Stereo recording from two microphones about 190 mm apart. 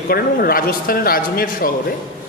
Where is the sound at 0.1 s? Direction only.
50° left (ahead or behind).